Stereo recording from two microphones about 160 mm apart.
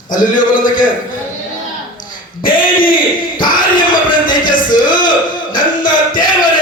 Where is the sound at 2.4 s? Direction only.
60° left (ahead or behind).